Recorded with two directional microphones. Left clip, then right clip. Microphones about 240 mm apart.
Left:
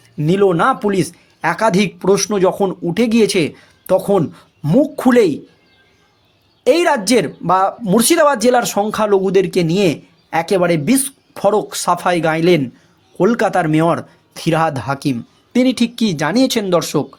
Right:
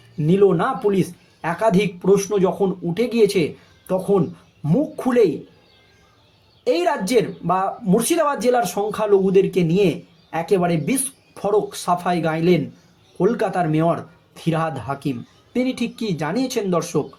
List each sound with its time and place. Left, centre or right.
0.2 s speech: left
6.7 s speech: left